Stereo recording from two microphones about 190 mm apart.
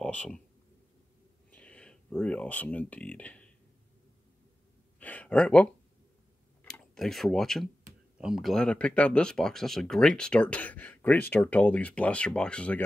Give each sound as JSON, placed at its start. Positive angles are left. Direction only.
{"t": 0.0, "sound": "speech", "side_deg": 5}
{"t": 1.5, "sound": "speech", "side_deg": 5}
{"t": 5.0, "sound": "a sound", "side_deg": 5}
{"t": 6.6, "sound": "speech", "side_deg": 5}